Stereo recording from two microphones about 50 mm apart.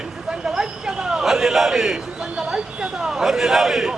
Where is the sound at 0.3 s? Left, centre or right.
Centre.